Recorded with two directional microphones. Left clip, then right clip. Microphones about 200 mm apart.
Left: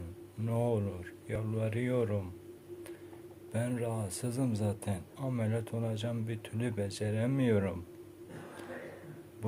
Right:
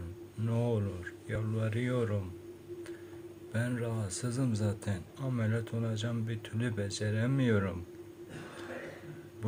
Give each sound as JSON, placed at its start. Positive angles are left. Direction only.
{"t": 0.4, "sound": "a man's voice", "side_deg": -20}
{"t": 3.5, "sound": "a man's voice", "side_deg": -20}